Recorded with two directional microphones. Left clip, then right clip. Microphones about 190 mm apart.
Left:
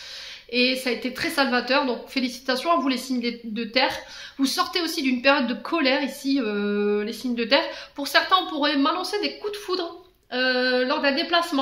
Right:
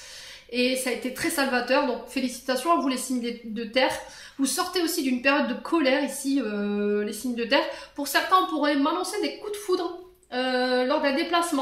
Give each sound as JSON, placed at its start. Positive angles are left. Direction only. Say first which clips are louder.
{"t": 0.6, "sound": "speech", "louder": "left 3 dB", "side_deg": 35}